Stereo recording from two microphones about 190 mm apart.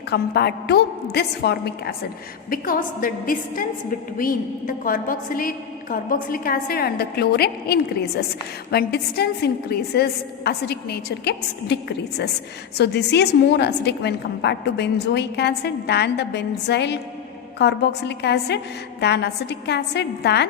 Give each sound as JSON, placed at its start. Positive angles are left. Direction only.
{"t": 0.1, "sound": "a woman's voice", "side_deg": 60}